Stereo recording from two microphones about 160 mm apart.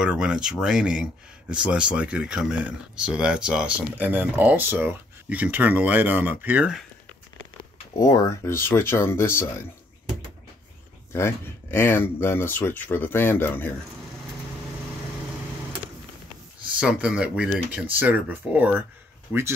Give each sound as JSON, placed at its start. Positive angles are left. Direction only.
{"t": 0.0, "sound": "speech", "side_deg": -5}
{"t": 8.0, "sound": "speech", "side_deg": 20}
{"t": 11.1, "sound": "speech", "side_deg": 15}
{"t": 16.8, "sound": "speech", "side_deg": -5}